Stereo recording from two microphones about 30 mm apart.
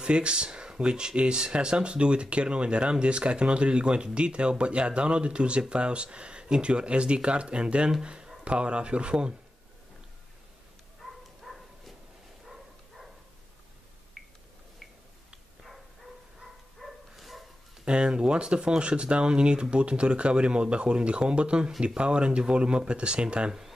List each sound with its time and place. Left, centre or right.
0.0 s speech: right
11.0 s dog: centre
12.4 s a sound: centre
17.1 s bow-wow: centre
17.8 s speech: right